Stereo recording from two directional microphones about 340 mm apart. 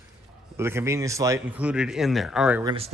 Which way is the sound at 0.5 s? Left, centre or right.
Centre.